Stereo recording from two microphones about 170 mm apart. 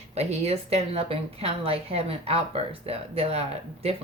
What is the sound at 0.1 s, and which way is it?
A woman's voice, 40° right (ahead or behind).